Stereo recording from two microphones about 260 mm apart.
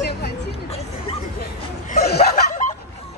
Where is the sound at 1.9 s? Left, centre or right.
Left.